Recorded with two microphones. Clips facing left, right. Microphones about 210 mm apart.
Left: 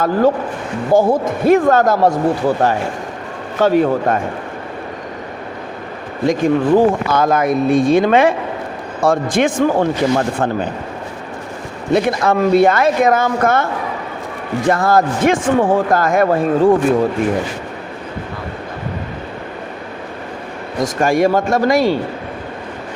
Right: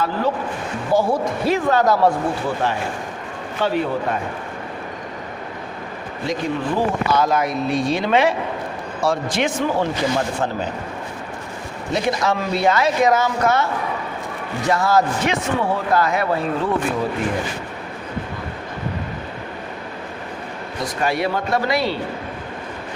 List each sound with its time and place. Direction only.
0.0 s speech: 45° left (ahead or behind)
6.2 s speech: 50° left (ahead or behind)
12.0 s speech: 55° left (ahead or behind)
14.7 s speech: 55° left (ahead or behind)
20.8 s speech: 45° left (ahead or behind)